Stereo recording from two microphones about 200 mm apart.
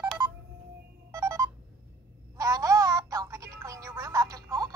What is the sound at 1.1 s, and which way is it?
Music, 15° right (ahead or behind).